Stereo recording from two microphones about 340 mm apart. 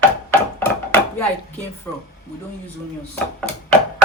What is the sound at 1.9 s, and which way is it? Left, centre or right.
Speech, centre.